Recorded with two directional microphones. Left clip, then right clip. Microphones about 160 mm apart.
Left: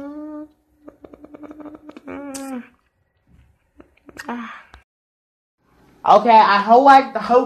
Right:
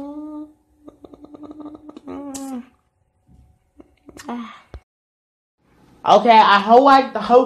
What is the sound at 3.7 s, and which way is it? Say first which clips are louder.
Whispering: left 4 dB; 10° right (ahead or behind).